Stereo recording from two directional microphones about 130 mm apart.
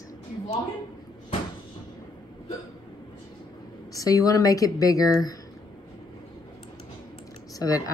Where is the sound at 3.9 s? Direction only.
25° left (ahead or behind).